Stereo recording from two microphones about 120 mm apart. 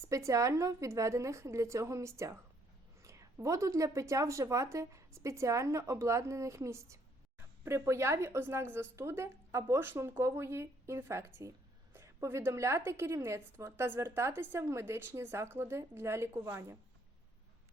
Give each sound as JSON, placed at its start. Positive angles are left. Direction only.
{"t": 0.1, "sound": "a woman's voice", "side_deg": -25}